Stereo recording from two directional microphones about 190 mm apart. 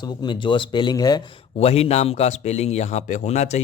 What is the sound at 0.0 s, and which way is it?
Speech, 25° left (ahead or behind).